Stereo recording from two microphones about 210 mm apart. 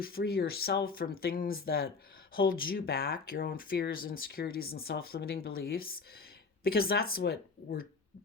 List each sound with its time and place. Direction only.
0.0 s speech: 45° left (ahead or behind)